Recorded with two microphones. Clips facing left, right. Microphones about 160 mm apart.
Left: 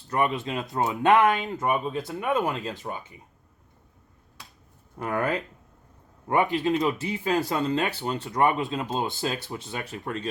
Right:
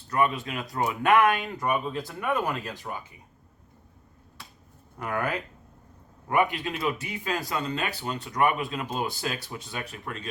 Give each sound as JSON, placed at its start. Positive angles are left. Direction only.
{"t": 0.1, "sound": "speech", "side_deg": 25}
{"t": 4.9, "sound": "speech", "side_deg": 25}